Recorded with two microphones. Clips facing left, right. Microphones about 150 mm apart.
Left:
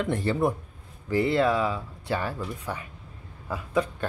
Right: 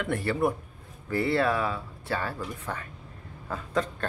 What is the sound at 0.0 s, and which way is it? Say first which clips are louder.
Speech: left 2 dB; 20° left (ahead or behind).